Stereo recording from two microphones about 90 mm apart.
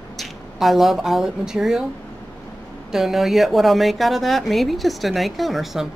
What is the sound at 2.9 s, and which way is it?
Speech, centre (ahead or behind).